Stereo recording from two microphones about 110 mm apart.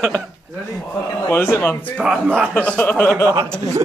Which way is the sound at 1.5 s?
20° left (ahead or behind).